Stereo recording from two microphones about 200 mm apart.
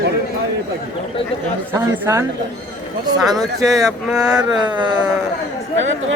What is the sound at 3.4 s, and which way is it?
Speech, centre (ahead or behind).